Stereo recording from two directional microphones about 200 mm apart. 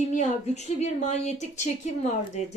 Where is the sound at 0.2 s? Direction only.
35° left (ahead or behind).